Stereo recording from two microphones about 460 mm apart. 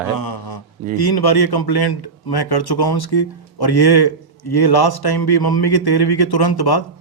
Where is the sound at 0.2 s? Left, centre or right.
Left.